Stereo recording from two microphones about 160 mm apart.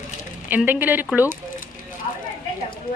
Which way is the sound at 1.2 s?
55° left (ahead or behind).